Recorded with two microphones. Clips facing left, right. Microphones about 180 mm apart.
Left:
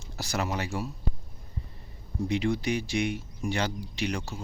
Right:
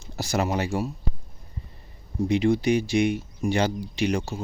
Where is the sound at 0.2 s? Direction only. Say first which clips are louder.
Right 6 dB; 25° right (ahead or behind).